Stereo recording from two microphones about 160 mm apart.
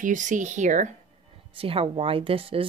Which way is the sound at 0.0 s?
50° right (ahead or behind).